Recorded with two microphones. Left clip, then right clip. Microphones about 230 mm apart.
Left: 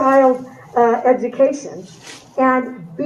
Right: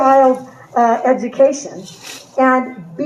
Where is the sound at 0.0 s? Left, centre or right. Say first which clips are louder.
Right 2 dB; right.